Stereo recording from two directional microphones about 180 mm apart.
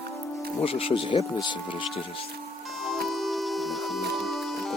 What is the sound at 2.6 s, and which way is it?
Music, centre (ahead or behind).